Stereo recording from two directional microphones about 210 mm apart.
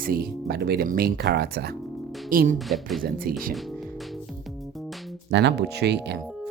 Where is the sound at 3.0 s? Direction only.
45° right (ahead or behind).